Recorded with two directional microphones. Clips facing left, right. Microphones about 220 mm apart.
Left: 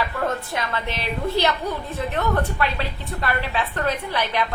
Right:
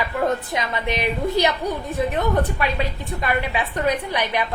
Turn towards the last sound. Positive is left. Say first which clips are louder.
# right 1 dB
turn(degrees=-15)  # may be behind; listen again after turning